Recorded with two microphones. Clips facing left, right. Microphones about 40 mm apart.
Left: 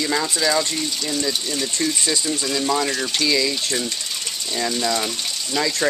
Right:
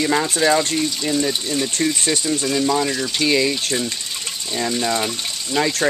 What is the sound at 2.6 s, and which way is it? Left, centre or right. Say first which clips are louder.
Speech: right 2 dB; centre.